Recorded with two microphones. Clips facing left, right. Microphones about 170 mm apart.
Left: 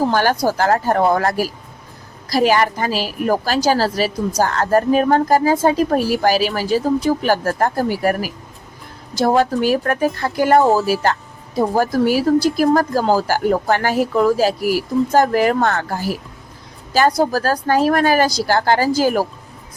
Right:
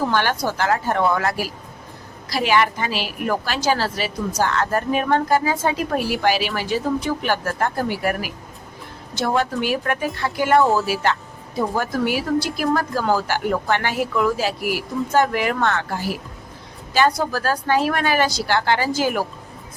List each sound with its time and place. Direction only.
0.0 s speech: 40° left (ahead or behind)